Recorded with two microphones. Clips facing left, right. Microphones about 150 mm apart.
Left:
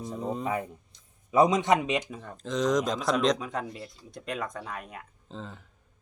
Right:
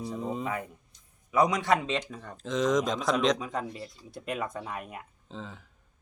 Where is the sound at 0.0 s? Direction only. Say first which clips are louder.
Even; centre (ahead or behind).